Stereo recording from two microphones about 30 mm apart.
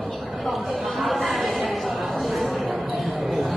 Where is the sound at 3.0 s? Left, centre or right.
Centre.